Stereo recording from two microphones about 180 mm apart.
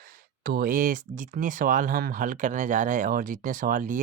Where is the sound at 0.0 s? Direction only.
55° right (ahead or behind).